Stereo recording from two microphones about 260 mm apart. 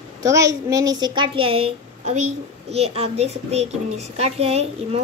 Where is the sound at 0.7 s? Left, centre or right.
Centre.